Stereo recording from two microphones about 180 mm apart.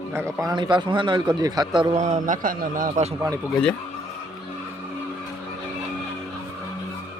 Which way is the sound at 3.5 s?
5° left (ahead or behind).